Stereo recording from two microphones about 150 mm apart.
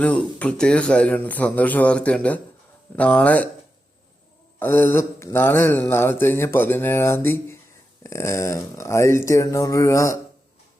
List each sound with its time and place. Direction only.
0.0 s speech: 10° left (ahead or behind)
4.6 s speech: 15° left (ahead or behind)